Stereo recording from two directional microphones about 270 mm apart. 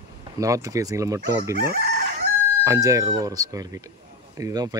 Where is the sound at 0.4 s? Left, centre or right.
Centre.